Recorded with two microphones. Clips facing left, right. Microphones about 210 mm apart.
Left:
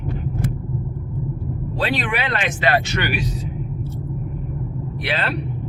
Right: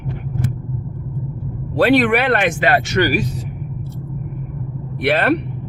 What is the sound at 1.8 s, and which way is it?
Speech, 65° right (ahead or behind).